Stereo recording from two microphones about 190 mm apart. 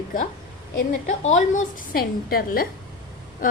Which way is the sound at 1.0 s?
40° left (ahead or behind).